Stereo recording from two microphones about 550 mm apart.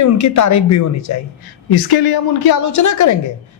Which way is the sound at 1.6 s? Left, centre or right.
Left.